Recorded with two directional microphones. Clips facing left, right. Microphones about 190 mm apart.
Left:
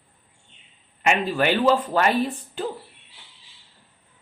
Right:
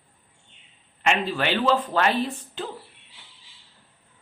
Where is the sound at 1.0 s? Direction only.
5° left (ahead or behind).